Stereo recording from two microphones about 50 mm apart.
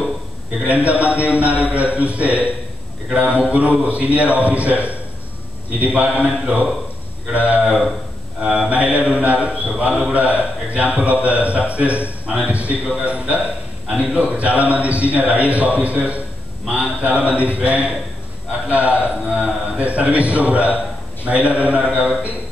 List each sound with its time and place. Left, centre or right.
0.7 s a man's voice: right